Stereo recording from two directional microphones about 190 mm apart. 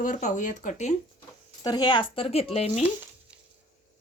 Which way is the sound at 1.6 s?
20° left (ahead or behind).